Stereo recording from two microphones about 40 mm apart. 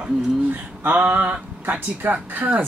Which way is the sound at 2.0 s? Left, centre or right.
Right.